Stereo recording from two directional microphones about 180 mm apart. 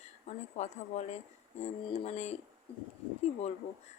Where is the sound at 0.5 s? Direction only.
40° left (ahead or behind).